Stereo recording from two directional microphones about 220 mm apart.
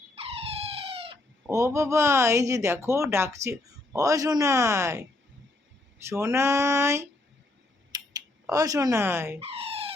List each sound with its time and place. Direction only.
0.2 s dog: 25° right (ahead or behind)
1.5 s speech: 15° right (ahead or behind)
6.1 s speech: 10° right (ahead or behind)
7.9 s typing: 15° right (ahead or behind)
8.4 s speech: 15° right (ahead or behind)
9.4 s a sound: 25° right (ahead or behind)